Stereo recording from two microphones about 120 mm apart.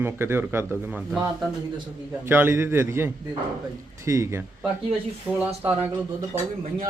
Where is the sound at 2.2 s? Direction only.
15° right (ahead or behind).